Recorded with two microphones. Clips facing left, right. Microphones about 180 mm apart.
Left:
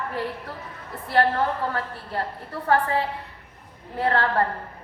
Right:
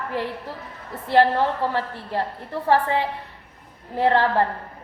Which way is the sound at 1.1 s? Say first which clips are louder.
Right 4 dB; 25° right (ahead or behind).